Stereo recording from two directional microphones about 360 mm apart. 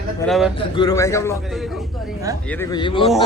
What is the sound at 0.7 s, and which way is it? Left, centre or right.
Speech, centre.